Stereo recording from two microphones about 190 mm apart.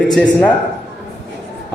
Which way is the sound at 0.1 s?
5° left (ahead or behind).